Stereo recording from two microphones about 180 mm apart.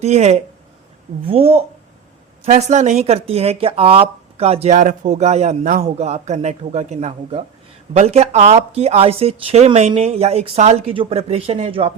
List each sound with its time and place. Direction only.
0.0 s speech: 40° right (ahead or behind)